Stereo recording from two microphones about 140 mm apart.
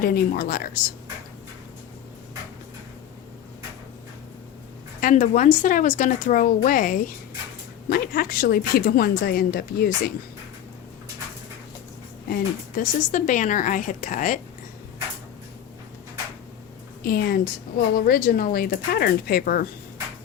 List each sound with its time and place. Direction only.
0.0 s a woman's voice: 90° left
4.9 s speech: 70° left (ahead or behind)
7.9 s a woman's voice: 90° left
12.3 s speech: 75° left (ahead or behind)
17.0 s a woman's voice: 90° left